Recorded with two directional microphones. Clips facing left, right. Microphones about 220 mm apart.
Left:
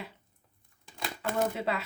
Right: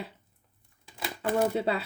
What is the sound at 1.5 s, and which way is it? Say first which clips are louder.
Speech: right 4 dB; 30° right (ahead or behind).